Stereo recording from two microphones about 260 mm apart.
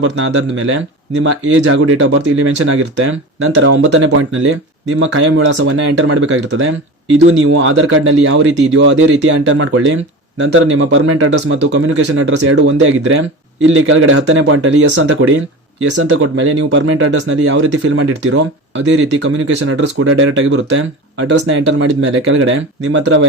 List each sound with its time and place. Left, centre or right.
0.0 s speech: right